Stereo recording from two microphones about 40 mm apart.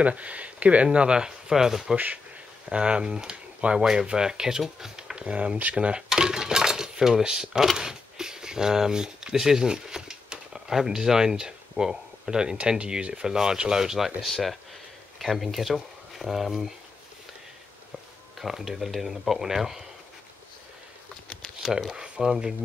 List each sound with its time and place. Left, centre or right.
0.0 s speech: right
0.9 s speech: right
2.7 s speech: right
3.8 s speech: centre
5.2 s speech: right
6.0 s speech: centre
18.4 s speech: centre
21.9 s a sound: right
22.2 s speech: centre